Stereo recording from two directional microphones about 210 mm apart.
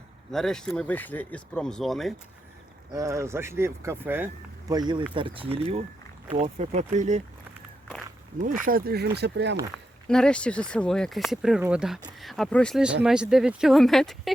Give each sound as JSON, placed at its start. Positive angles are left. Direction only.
{"t": 0.3, "sound": "speech", "side_deg": 0}
{"t": 2.9, "sound": "speech", "side_deg": -15}
{"t": 4.7, "sound": "speech", "side_deg": -20}
{"t": 8.4, "sound": "speech", "side_deg": -40}
{"t": 9.7, "sound": "speech", "side_deg": 5}